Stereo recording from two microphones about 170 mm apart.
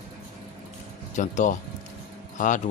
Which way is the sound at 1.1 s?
45° left (ahead or behind).